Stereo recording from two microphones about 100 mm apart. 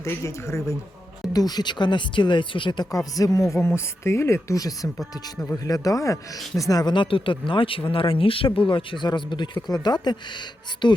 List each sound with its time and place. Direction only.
0.0 s speech: 30° left (ahead or behind)
1.3 s speech: 40° left (ahead or behind)
2.9 s speech: 35° left (ahead or behind)